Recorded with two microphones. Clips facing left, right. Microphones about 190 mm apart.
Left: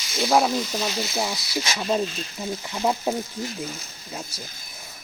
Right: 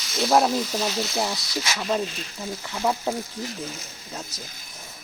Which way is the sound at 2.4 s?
20° left (ahead or behind).